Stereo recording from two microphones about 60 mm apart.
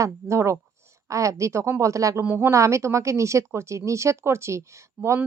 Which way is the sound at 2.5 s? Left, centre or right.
Right.